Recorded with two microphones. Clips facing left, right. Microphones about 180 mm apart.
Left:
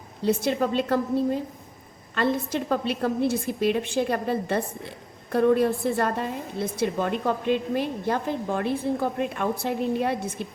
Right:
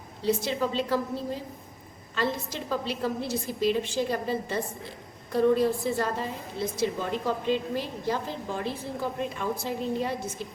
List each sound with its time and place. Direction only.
0.3 s a woman's voice: 55° left (ahead or behind)